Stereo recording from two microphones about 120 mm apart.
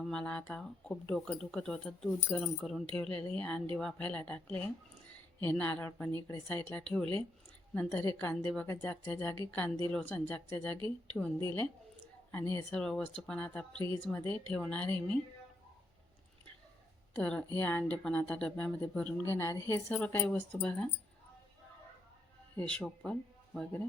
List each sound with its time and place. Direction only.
0.0 s speech: 5° left (ahead or behind); by 12.6 s 20° left (ahead or behind)
12.7 s speech: 5° left (ahead or behind)
13.8 s speech: 25° left (ahead or behind)
14.2 s speech: 15° left (ahead or behind)
17.5 s speech: 15° left (ahead or behind)
19.2 s speech: 20° left (ahead or behind)
22.5 s speech: 10° left (ahead or behind)